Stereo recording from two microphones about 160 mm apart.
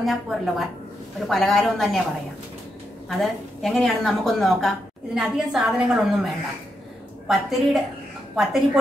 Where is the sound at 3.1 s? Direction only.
Centre (ahead or behind).